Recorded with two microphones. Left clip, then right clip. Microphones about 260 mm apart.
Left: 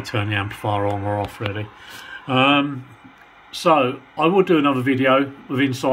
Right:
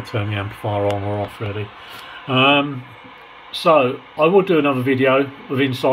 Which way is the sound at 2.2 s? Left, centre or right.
Centre.